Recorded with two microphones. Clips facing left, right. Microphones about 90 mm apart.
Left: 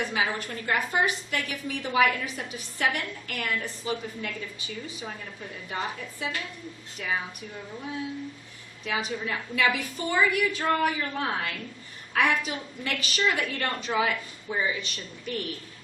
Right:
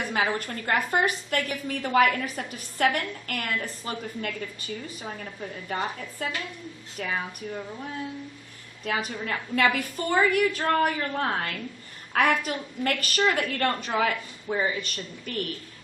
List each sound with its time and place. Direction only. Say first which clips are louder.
0.1 s a woman's voice: right 2 dB; 50° right (ahead or behind)
6.2 s a woman's voice: right 1 dB; 50° right (ahead or behind)
8.8 s a woman's voice: right 1 dB; 45° right (ahead or behind)